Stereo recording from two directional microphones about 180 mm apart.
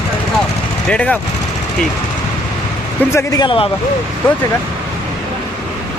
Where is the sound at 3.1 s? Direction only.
20° left (ahead or behind).